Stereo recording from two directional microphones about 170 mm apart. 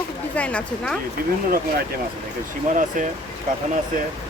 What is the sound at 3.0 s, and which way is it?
Speech, 50° right (ahead or behind).